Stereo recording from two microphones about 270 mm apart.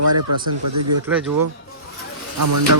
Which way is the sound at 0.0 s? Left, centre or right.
Right.